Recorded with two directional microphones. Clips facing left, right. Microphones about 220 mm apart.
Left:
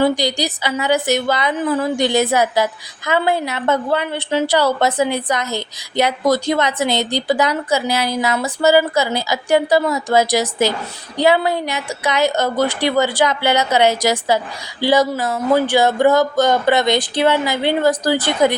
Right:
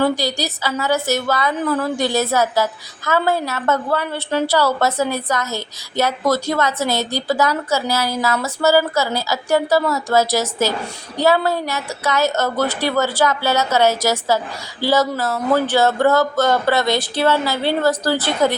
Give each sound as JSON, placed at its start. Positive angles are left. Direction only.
{"t": 0.0, "sound": "a woman's voice", "side_deg": 15}